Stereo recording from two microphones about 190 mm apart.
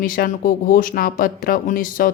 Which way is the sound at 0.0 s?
45° left (ahead or behind).